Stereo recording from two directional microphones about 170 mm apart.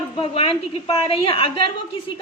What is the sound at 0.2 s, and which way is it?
A woman's voice, 30° left (ahead or behind).